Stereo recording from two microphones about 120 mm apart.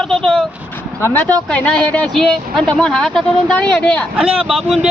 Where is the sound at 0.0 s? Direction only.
5° left (ahead or behind).